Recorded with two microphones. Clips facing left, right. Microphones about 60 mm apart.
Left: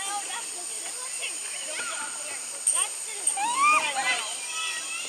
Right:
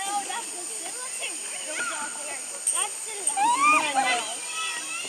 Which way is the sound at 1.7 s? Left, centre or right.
Centre.